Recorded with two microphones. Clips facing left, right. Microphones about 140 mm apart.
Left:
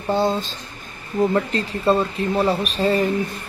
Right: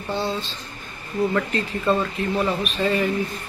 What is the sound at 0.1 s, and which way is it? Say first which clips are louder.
Speech: left 6 dB; 45° left (ahead or behind).